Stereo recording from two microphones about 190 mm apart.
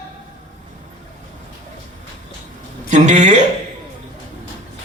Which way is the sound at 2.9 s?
40° right (ahead or behind).